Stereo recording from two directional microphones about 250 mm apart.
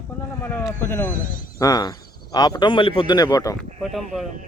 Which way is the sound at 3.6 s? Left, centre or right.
Centre.